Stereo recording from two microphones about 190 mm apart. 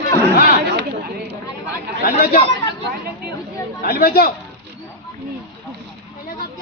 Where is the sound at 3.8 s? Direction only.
55° left (ahead or behind).